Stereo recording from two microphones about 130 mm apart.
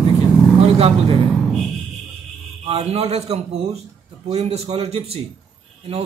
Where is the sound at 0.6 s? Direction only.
50° right (ahead or behind).